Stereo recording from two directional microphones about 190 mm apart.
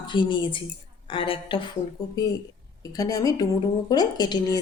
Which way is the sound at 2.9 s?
20° left (ahead or behind).